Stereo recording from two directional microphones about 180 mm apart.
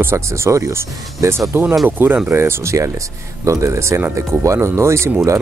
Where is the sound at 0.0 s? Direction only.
15° right (ahead or behind).